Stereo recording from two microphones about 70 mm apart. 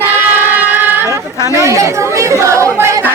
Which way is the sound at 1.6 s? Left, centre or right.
Right.